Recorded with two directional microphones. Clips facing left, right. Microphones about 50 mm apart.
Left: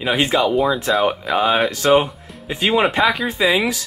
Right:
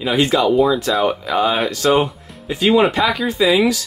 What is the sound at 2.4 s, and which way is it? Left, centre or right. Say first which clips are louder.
Speech: right 3 dB; left.